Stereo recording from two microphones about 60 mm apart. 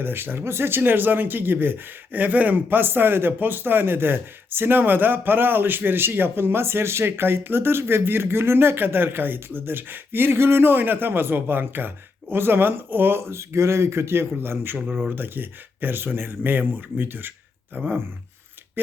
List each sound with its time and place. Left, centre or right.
0.0 s speech: right